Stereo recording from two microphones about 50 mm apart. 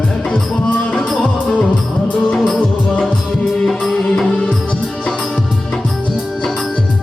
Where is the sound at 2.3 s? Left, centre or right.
Centre.